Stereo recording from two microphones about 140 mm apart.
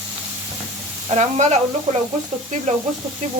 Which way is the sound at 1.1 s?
55° right (ahead or behind).